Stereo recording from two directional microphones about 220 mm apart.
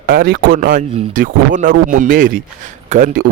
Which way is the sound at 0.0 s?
40° right (ahead or behind).